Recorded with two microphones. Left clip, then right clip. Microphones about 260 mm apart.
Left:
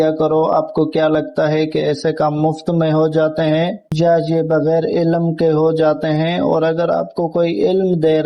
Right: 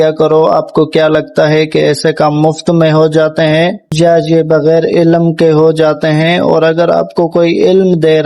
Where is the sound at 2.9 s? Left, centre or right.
Right.